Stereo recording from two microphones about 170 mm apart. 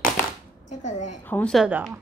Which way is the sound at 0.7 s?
45° left (ahead or behind).